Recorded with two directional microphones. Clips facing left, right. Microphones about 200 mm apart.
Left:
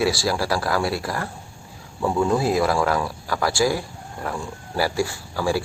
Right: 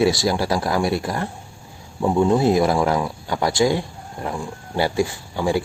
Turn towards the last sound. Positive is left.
turn(degrees=-20)  # may be behind; listen again after turning